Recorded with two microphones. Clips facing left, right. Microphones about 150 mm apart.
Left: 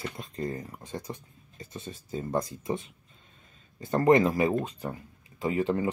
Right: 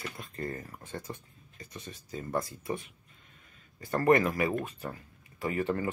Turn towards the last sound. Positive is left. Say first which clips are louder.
# left 4 dB
turn(degrees=15)  # may be behind; listen again after turning